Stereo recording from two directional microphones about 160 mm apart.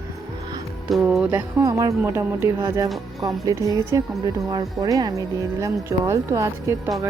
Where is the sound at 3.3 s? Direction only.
20° right (ahead or behind).